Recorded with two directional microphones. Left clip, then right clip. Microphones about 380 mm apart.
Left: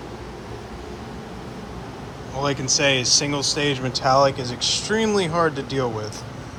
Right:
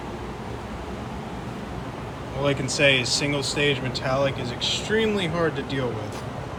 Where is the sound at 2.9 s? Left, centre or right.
Centre.